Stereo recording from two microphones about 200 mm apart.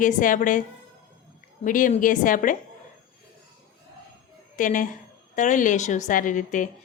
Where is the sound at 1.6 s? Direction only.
40° left (ahead or behind).